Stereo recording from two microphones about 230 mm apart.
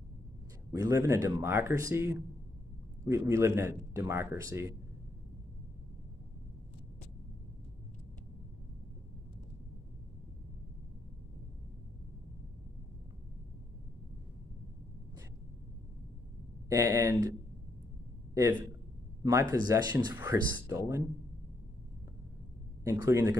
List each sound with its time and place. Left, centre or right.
0.7 s speech: centre
16.6 s speech: centre
18.3 s a man's voice: centre
22.8 s speech: centre